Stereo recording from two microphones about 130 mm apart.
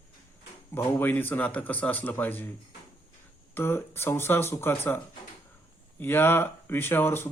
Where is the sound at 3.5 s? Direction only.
15° left (ahead or behind).